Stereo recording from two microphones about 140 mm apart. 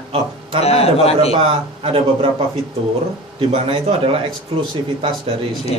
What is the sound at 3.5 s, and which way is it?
A man's voice, 40° right (ahead or behind).